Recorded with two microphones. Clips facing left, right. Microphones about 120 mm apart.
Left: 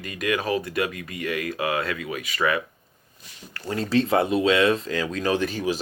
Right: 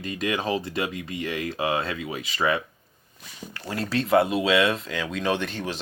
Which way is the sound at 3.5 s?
5° right (ahead or behind).